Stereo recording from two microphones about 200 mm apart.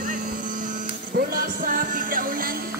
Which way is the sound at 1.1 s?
45° right (ahead or behind).